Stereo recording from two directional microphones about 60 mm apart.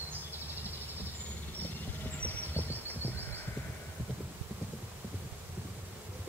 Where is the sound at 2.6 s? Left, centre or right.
Right.